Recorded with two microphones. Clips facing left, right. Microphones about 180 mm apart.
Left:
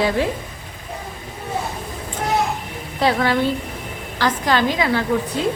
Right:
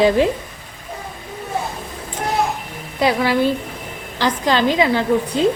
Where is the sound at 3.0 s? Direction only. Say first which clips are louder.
Right 2 dB; 10° right (ahead or behind).